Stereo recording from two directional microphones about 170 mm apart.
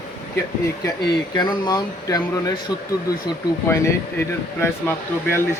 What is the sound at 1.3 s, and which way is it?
Speech, 25° left (ahead or behind).